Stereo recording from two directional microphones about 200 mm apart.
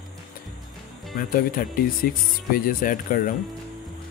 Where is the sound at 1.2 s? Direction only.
45° left (ahead or behind).